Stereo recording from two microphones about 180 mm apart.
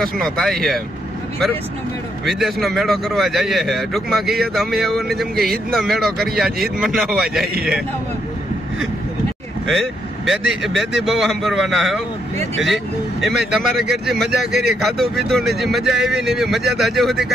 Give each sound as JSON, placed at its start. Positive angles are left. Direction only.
{"t": 0.0, "sound": "a man's voice", "side_deg": 5}
{"t": 2.2, "sound": "a man's voice", "side_deg": 0}
{"t": 9.7, "sound": "a man's voice", "side_deg": 0}
{"t": 14.5, "sound": "speech", "side_deg": -65}
{"t": 14.8, "sound": "a man's voice", "side_deg": 0}